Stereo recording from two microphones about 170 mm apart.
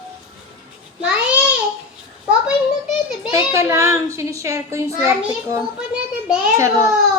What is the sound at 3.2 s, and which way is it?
A child's voice, 15° right (ahead or behind).